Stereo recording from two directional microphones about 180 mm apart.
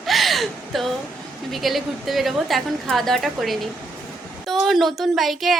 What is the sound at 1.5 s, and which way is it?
A woman's voice, centre (ahead or behind).